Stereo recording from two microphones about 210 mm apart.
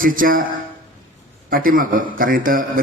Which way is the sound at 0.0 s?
40° right (ahead or behind).